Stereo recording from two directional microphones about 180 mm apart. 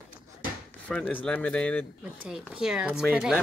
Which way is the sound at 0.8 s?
5° left (ahead or behind).